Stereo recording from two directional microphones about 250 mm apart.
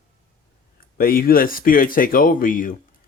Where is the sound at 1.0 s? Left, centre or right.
Left.